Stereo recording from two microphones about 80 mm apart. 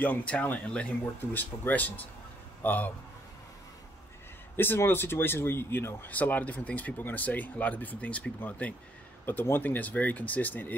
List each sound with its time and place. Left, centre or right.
0.0 s speech: centre
4.6 s speech: left